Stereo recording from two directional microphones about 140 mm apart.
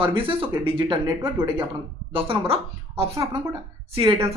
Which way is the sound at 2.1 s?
40° right (ahead or behind).